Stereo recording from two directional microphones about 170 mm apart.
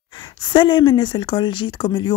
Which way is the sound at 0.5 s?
25° left (ahead or behind).